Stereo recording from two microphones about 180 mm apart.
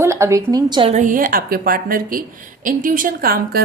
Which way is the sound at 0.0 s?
15° right (ahead or behind).